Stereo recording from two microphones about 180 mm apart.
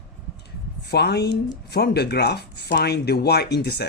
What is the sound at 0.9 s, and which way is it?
Speech, 65° left (ahead or behind).